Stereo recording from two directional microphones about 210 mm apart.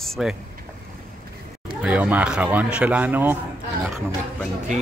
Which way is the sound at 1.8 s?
5° right (ahead or behind).